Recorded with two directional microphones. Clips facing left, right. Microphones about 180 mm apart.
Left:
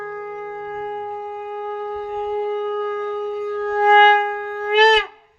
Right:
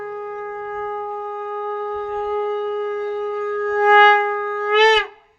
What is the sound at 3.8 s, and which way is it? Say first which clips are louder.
Music: even; 35° left (ahead or behind).